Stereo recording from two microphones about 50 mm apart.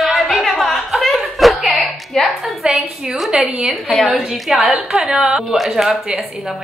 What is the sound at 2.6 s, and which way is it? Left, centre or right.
Speech, centre.